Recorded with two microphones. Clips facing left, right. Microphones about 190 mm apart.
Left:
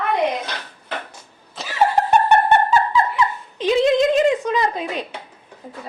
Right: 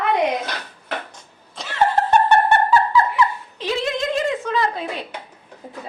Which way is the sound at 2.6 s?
20° left (ahead or behind).